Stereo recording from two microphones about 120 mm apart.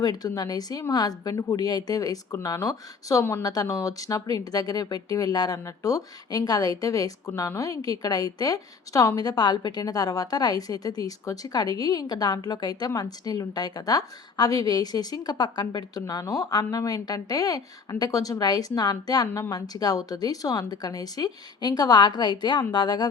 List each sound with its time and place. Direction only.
0.0 s speech: 35° left (ahead or behind)